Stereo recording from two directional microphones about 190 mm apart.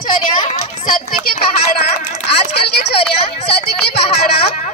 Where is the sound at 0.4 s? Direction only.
45° left (ahead or behind).